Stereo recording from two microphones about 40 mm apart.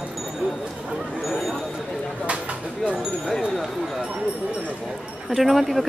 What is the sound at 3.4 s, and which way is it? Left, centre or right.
Speech, centre.